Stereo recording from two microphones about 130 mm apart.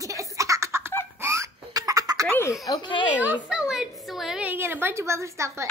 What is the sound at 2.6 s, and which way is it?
Speech, 35° left (ahead or behind).